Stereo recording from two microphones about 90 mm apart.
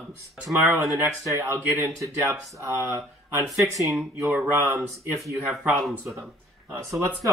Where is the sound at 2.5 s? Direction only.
30° right (ahead or behind).